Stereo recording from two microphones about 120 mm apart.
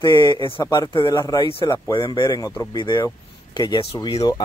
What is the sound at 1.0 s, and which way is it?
Speech, 40° left (ahead or behind).